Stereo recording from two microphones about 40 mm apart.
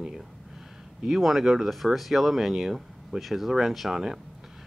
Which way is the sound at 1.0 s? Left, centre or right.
Centre.